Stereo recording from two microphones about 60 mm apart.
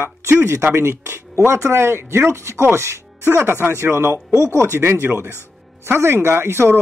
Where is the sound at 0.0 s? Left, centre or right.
Right.